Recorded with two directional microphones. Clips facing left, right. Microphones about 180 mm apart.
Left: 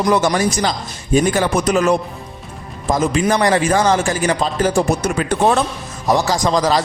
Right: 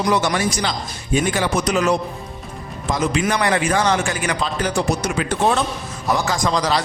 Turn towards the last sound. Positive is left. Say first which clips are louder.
# left 4 dB
turn(degrees=45)  # may be behind; listen again after turning